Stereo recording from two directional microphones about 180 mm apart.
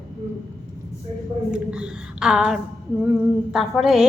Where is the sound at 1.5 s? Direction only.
5° right (ahead or behind).